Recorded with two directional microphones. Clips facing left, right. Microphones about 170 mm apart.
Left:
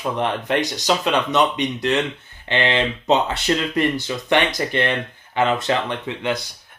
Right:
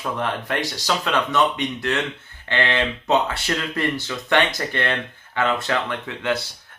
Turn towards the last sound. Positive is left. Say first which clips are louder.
# left 1 dB
turn(degrees=15)  # may be behind; listen again after turning